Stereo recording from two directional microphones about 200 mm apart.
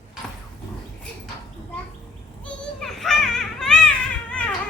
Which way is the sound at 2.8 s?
Centre (ahead or behind).